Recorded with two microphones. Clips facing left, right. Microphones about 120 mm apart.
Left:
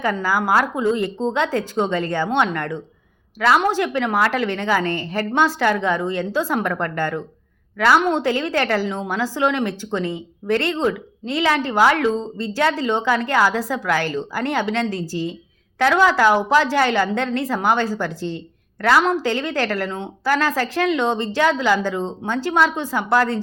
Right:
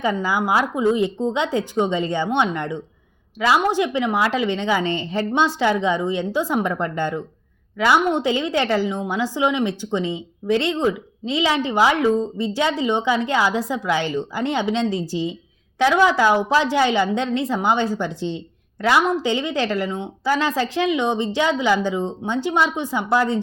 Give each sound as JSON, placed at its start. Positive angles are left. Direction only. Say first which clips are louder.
{"t": 0.0, "sound": "a woman's voice", "louder": "even", "side_deg": -20}